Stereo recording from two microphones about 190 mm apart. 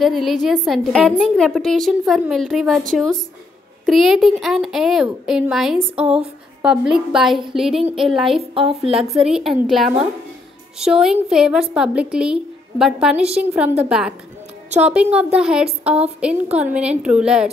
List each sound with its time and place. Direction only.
0.0 s a woman's voice: centre (ahead or behind)
3.8 s a woman's voice: centre (ahead or behind)
8.4 s a woman's voice: 30° right (ahead or behind)
9.2 s a woman's voice: centre (ahead or behind)